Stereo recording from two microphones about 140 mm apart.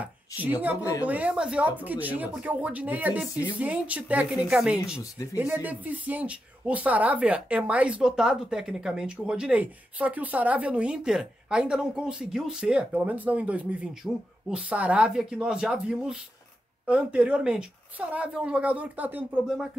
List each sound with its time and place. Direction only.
0.0 s speech: 10° right (ahead or behind)